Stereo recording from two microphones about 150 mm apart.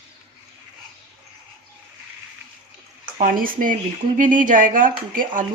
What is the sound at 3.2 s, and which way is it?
Speech, 65° right (ahead or behind).